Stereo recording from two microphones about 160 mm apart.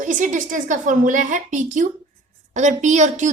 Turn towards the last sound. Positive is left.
turn(degrees=-50)  # may be behind; listen again after turning